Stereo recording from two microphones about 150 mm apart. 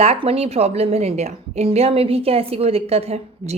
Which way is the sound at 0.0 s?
40° right (ahead or behind).